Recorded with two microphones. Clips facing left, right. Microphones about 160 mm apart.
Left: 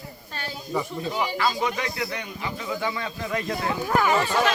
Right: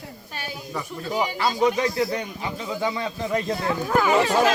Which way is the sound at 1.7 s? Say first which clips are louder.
Right 6 dB; 35° right (ahead or behind).